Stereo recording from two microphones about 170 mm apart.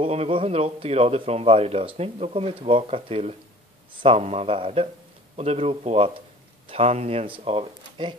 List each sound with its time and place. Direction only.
0.0 s speech: 35° right (ahead or behind)